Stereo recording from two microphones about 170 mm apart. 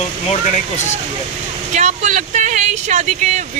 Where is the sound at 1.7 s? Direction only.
45° right (ahead or behind).